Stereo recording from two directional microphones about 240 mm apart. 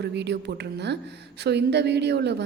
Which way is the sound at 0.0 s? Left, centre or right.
Right.